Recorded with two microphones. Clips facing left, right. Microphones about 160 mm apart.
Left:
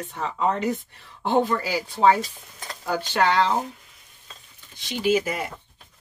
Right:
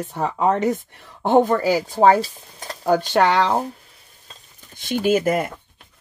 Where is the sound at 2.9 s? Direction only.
50° right (ahead or behind).